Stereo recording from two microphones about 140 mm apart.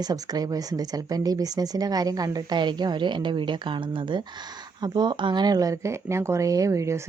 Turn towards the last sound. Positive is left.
turn(degrees=-20)  # may be behind; listen again after turning